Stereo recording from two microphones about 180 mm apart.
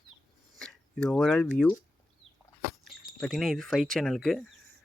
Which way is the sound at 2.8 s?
Centre (ahead or behind).